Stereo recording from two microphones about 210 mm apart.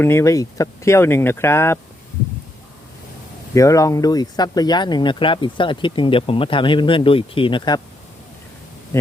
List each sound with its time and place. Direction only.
0.0 s speech: 10° left (ahead or behind)
3.5 s speech: 15° left (ahead or behind)